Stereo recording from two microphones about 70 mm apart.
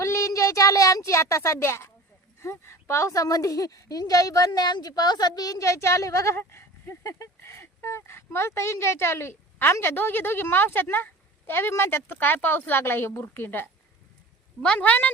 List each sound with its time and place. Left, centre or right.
0.0 s a child's voice: left
14.6 s a woman's voice: centre